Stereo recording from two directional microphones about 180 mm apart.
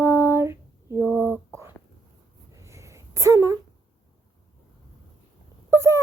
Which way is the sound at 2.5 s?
15° right (ahead or behind).